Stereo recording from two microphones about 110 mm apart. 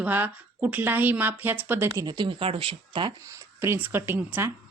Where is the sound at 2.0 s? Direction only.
40° right (ahead or behind).